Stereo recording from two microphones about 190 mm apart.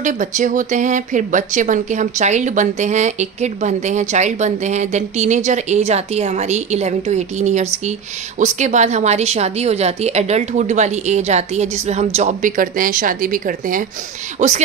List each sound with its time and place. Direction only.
0.0 s speech: 40° right (ahead or behind)